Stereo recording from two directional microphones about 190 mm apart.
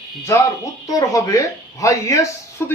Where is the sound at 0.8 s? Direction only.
20° left (ahead or behind).